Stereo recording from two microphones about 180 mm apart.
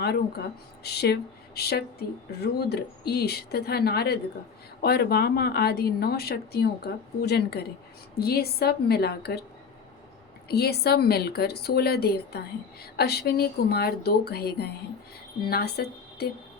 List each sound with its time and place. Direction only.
0.0 s speech: 60° left (ahead or behind)
10.5 s a woman's voice: 65° left (ahead or behind)